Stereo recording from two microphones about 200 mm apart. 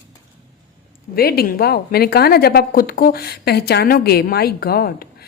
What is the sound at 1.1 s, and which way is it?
A woman's voice, 50° left (ahead or behind).